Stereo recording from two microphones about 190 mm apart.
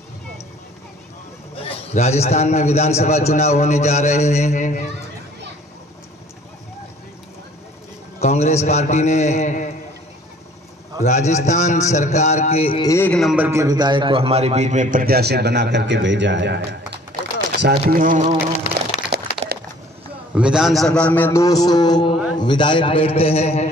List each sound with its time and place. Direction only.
1.6 s a man's voice: 35° left (ahead or behind)
8.2 s a sound: 35° left (ahead or behind)
8.6 s a man's voice: 35° left (ahead or behind)
11.0 s a man's voice: 35° left (ahead or behind)
12.8 s a man's voice: 10° left (ahead or behind)
13.2 s a man's voice: 5° right (ahead or behind)
13.5 s a man's voice: 20° right (ahead or behind); by 18.3 s 45° right (ahead or behind)
19.1 s a sound: 60° right (ahead or behind)
20.3 s a man's voice: 5° right (ahead or behind); by 23.7 s 35° left (ahead or behind)